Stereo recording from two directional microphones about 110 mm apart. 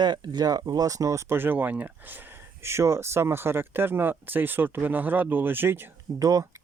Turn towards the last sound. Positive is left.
turn(degrees=-30)  # may be behind; listen again after turning